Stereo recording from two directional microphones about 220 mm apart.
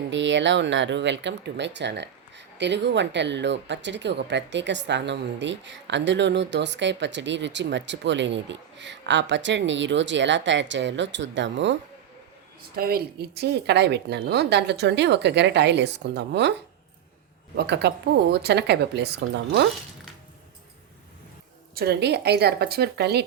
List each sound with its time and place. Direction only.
0.1 s speech: 55° right (ahead or behind)
12.7 s a woman's voice: 45° right (ahead or behind)
17.7 s a woman's voice: 50° right (ahead or behind)
21.8 s a woman's voice: 50° right (ahead or behind)